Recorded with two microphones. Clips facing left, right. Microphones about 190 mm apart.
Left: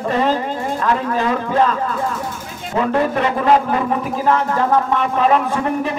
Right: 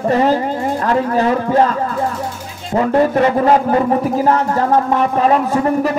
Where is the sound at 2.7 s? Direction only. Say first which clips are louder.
Right 4 dB; 40° right (ahead or behind).